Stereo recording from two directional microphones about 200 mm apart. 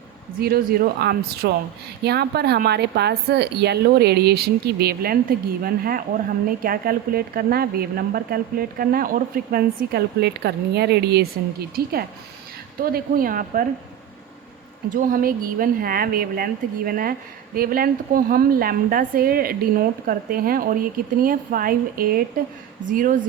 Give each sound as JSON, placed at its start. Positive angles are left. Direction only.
{"t": 0.3, "sound": "speech", "side_deg": -50}
{"t": 14.8, "sound": "speech", "side_deg": -40}